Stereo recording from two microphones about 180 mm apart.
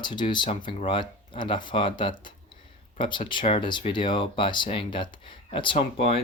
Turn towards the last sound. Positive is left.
turn(degrees=30)  # may be behind; listen again after turning